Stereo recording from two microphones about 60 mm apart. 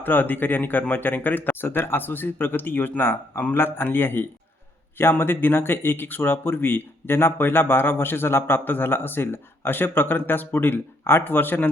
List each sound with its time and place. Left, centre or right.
0.0 s speech: left